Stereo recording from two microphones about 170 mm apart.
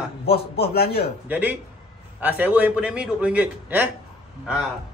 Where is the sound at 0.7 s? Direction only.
65° left (ahead or behind).